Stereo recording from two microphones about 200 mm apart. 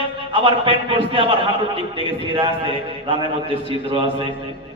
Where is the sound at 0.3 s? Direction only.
25° right (ahead or behind).